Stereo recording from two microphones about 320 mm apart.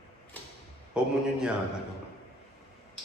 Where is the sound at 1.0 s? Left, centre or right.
Centre.